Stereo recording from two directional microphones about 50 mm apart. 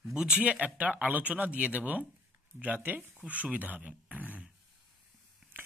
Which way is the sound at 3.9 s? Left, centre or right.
Right.